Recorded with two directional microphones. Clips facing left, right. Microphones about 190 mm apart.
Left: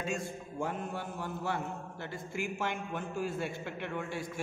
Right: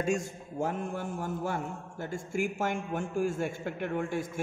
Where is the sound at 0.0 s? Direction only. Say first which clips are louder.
Right 6 dB; 45° right (ahead or behind).